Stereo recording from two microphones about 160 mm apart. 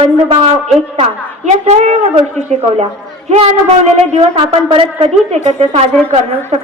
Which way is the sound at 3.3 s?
40° right (ahead or behind).